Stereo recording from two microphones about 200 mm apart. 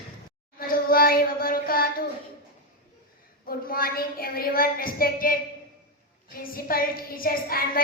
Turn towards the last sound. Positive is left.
turn(degrees=45)  # may be behind; listen again after turning